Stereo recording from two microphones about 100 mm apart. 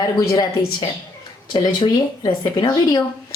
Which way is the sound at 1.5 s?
50° left (ahead or behind).